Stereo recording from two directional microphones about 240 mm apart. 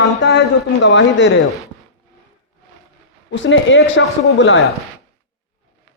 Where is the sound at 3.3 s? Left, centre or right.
Left.